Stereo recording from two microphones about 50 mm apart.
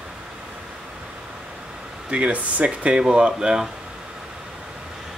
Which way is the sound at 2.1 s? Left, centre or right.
Right.